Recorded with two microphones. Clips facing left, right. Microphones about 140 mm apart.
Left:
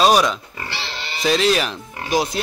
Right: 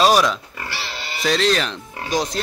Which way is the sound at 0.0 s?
Centre (ahead or behind).